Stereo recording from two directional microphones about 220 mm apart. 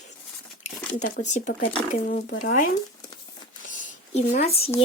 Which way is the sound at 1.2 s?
35° left (ahead or behind).